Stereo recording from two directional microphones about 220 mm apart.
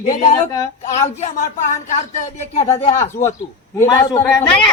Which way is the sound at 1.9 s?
30° left (ahead or behind).